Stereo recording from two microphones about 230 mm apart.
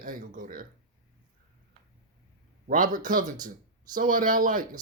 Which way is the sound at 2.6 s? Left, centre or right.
Right.